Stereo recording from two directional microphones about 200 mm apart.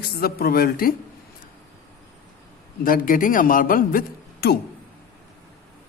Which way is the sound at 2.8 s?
45° left (ahead or behind).